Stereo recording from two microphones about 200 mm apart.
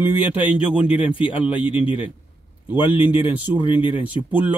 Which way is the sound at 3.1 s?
10° right (ahead or behind).